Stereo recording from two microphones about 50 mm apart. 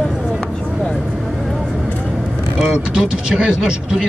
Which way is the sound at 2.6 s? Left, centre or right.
Centre.